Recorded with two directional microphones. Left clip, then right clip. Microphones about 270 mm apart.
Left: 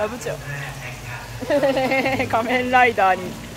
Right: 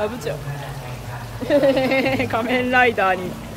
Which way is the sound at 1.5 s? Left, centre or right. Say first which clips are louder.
Right 2 dB; centre.